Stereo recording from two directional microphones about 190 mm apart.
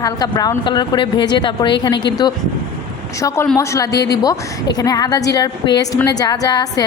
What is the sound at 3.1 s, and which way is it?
A woman's voice, 15° left (ahead or behind).